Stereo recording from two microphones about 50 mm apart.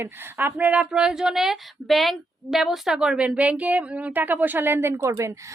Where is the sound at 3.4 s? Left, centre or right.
Right.